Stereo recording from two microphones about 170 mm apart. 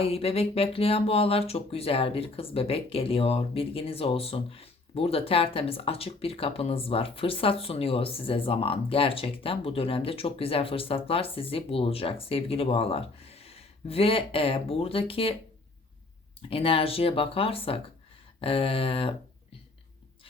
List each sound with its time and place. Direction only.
0.0 s speech: 35° left (ahead or behind)
16.5 s speech: 35° left (ahead or behind)